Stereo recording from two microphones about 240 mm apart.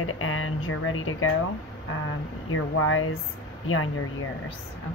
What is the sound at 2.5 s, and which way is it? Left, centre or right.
Speech, left.